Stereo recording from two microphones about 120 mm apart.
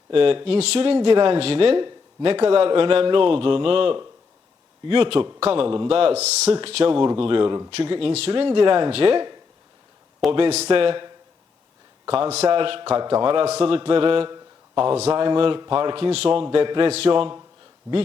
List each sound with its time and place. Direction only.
0.1 s speech: 50° right (ahead or behind)
10.3 s speech: 55° right (ahead or behind)
15.1 s speech: 45° right (ahead or behind)